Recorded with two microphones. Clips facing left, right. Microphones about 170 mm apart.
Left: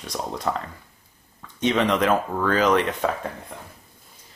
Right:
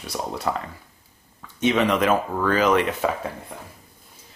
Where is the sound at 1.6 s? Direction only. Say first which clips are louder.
Right 1 dB; 5° right (ahead or behind).